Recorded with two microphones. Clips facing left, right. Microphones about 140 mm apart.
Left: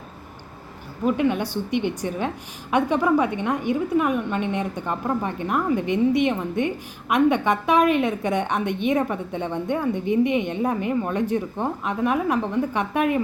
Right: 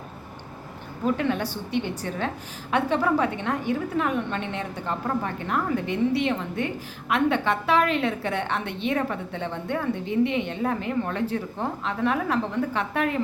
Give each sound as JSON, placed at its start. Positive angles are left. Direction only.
{"t": 1.0, "sound": "a woman's voice", "side_deg": 10}